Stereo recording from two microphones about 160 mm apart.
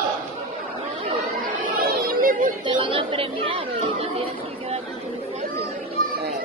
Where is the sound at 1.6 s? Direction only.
60° right (ahead or behind).